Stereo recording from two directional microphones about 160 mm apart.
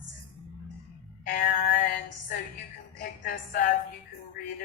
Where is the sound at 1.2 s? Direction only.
65° left (ahead or behind).